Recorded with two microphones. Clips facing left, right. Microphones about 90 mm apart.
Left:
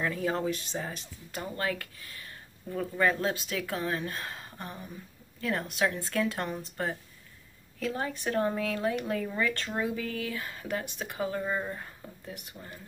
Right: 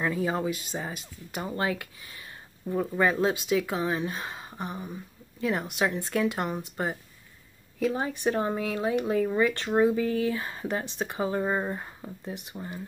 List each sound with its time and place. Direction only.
0.0 s speech: 10° right (ahead or behind)
9.8 s speech: 30° right (ahead or behind)